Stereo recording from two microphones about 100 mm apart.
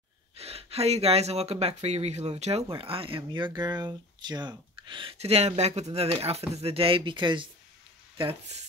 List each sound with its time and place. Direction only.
0.4 s speech: 85° right; by 5.1 s 55° right (ahead or behind)
5.2 s speech: 90° right; by 7.4 s 55° right (ahead or behind)